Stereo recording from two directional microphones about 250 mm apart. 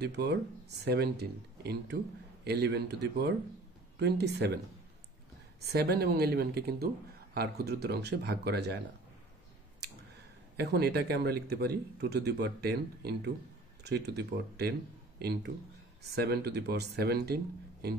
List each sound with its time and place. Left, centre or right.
0.0 s speech: right
5.6 s speech: right
10.6 s speech: right